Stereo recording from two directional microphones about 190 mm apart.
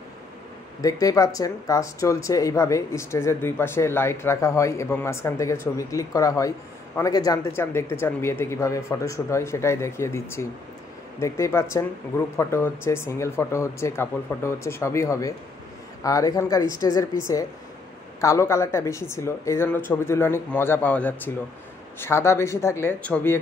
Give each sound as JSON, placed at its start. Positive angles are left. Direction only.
{"t": 0.7, "sound": "speech", "side_deg": 20}